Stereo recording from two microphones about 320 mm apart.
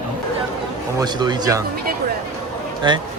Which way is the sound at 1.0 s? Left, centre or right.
Centre.